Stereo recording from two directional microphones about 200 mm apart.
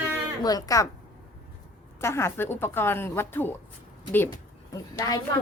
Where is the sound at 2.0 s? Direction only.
15° left (ahead or behind).